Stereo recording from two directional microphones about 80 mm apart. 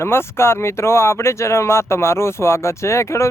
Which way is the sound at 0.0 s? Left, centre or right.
Left.